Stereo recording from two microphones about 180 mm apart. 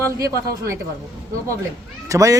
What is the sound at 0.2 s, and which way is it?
Speech, 20° right (ahead or behind).